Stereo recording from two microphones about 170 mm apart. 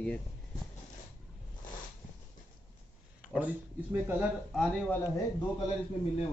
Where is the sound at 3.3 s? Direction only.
10° right (ahead or behind).